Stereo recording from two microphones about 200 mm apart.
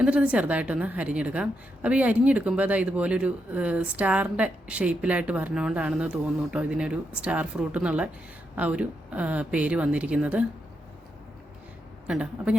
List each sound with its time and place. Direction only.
0.0 s a woman's voice: 5° right (ahead or behind)
12.0 s a woman's voice: 5° right (ahead or behind)